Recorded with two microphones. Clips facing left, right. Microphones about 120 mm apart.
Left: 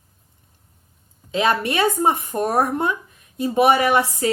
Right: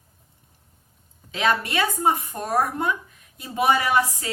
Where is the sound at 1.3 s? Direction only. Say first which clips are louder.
Left 3 dB; 25° left (ahead or behind).